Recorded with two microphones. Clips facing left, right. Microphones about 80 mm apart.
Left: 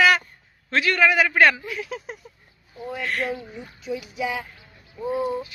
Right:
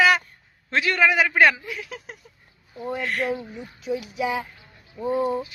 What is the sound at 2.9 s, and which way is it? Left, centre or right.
Speech, centre.